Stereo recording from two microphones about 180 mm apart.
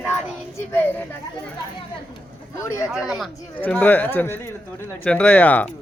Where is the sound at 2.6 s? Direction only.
15° left (ahead or behind).